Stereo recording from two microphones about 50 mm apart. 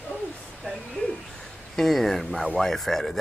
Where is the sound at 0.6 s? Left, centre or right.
Centre.